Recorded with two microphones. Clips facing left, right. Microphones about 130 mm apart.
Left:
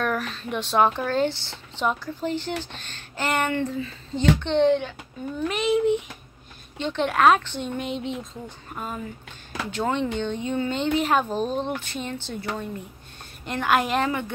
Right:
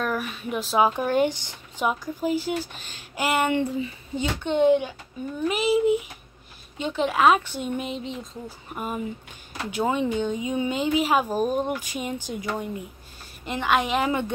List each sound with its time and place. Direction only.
0.0 s speech: 5° right (ahead or behind)
8.7 s speech: 10° right (ahead or behind)
13.5 s speech: centre (ahead or behind)
14.0 s speech: 20° right (ahead or behind)